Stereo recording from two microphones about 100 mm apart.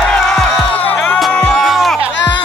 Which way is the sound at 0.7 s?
15° left (ahead or behind).